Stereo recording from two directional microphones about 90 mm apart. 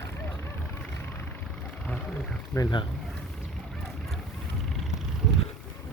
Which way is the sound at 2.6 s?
40° left (ahead or behind).